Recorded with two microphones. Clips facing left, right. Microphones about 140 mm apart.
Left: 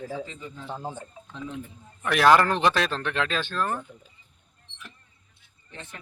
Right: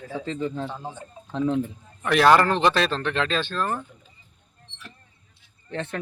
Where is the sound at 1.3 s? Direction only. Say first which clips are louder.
Right 13 dB; 70° right (ahead or behind).